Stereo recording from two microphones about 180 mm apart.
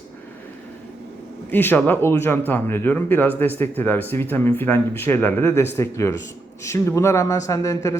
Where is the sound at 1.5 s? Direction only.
10° left (ahead or behind).